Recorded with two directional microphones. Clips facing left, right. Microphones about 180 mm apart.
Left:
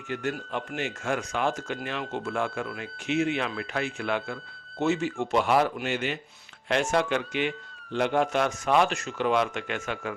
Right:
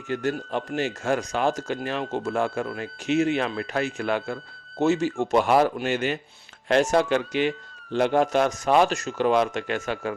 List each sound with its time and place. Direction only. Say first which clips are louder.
0.1 s speech: right 4 dB; 35° right (ahead or behind)